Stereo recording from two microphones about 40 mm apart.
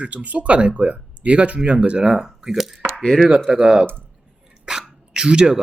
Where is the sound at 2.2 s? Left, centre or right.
Centre.